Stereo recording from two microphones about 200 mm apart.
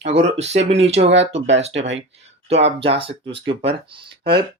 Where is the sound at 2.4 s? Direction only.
30° right (ahead or behind).